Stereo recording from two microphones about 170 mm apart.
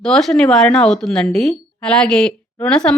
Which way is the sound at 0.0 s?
5° left (ahead or behind).